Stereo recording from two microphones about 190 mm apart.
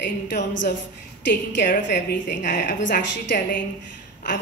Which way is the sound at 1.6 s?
45° left (ahead or behind).